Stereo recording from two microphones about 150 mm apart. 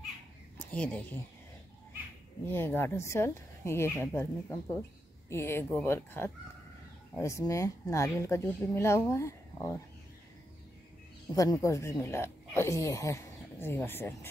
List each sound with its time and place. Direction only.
0.7 s speech: 10° left (ahead or behind)
2.4 s speech: 15° left (ahead or behind)
11.3 s speech: 20° left (ahead or behind)